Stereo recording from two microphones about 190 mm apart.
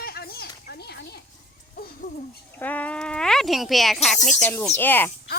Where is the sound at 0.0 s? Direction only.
55° left (ahead or behind).